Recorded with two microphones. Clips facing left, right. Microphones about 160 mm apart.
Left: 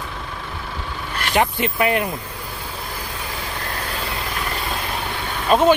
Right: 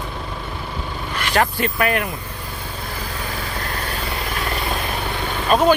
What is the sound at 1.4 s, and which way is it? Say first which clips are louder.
Speech: even; 20° left (ahead or behind).